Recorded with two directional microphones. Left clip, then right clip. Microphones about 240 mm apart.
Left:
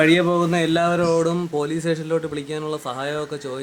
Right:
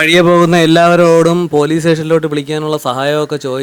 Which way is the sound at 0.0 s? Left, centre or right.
Right.